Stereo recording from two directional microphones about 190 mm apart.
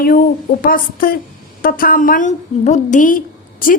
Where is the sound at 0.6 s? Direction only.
45° left (ahead or behind).